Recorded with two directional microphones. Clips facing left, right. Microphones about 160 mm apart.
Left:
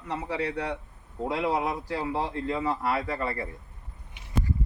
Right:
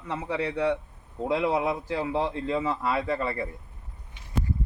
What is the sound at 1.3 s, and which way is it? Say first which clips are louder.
A man's voice: right 2 dB; 25° right (ahead or behind).